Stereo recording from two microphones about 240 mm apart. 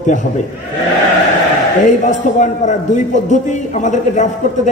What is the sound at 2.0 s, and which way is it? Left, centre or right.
A man's voice, left.